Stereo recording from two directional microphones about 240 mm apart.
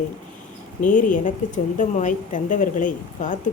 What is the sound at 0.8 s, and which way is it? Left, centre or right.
A woman's voice, left.